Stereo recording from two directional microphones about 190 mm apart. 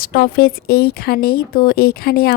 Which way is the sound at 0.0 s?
50° left (ahead or behind).